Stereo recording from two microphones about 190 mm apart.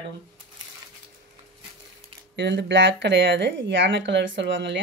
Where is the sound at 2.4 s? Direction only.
65° right (ahead or behind).